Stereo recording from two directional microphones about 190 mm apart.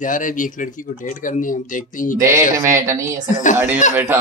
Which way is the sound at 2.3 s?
15° right (ahead or behind).